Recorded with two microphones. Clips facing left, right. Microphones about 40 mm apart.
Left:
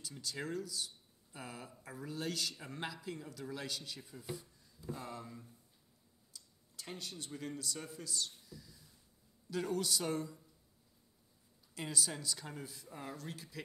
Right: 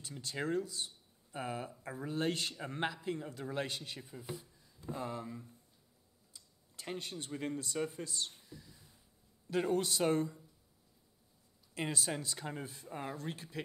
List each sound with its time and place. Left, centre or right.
0.0 s speech: right
4.1 s speech: right
11.7 s speech: right